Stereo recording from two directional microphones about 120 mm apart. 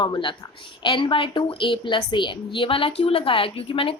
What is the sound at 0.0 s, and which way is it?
A woman's voice, 40° left (ahead or behind).